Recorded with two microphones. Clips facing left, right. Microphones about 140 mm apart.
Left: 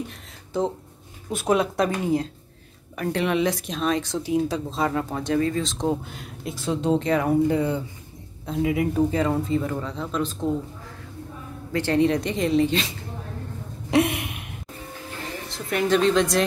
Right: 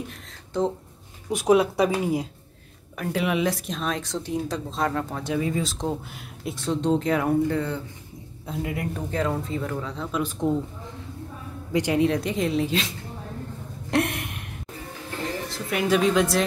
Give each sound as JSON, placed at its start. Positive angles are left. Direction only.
{"t": 0.5, "sound": "speech", "side_deg": 5}
{"t": 1.3, "sound": "speech", "side_deg": -10}
{"t": 7.4, "sound": "speech", "side_deg": 15}
{"t": 8.5, "sound": "speech", "side_deg": 0}
{"t": 10.4, "sound": "speech", "side_deg": -20}
{"t": 11.7, "sound": "speech", "side_deg": -15}
{"t": 12.0, "sound": "speech", "side_deg": 0}
{"t": 13.8, "sound": "a sound", "side_deg": 5}
{"t": 15.5, "sound": "a woman's voice", "side_deg": -5}